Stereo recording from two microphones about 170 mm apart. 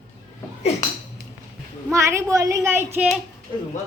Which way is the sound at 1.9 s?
15° right (ahead or behind).